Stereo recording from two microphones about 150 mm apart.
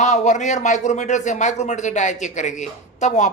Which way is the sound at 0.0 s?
50° left (ahead or behind).